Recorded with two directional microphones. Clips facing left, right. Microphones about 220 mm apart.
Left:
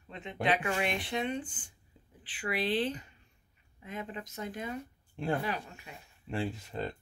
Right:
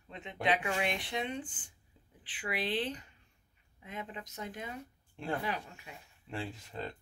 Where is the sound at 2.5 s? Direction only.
15° right (ahead or behind).